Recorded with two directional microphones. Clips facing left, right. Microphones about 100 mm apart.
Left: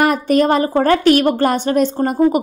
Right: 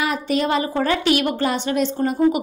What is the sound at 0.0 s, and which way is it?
A woman's voice, 50° left (ahead or behind).